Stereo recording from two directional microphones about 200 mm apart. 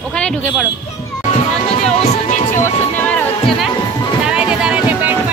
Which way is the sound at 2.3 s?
40° left (ahead or behind).